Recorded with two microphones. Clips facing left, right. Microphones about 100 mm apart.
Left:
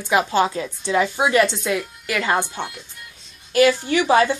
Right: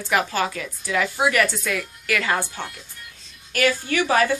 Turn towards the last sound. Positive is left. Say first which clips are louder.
# left 3 dB
turn(degrees=20)  # may be behind; listen again after turning